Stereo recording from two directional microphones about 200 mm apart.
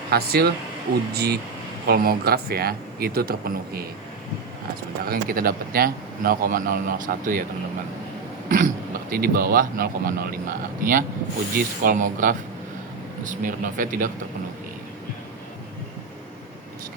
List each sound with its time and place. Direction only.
0.1 s speech: 50° right (ahead or behind)
5.0 s speech: 50° right (ahead or behind)
8.4 s speech: 45° right (ahead or behind)